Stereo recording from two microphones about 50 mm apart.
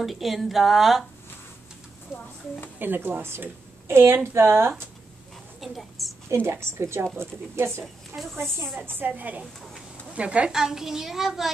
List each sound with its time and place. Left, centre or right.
0.0 s speech: centre
2.1 s a child's voice: centre
2.8 s speech: right
5.6 s a sound: centre
6.3 s speech: right
8.7 s a woman's voice: right
10.5 s a child's voice: centre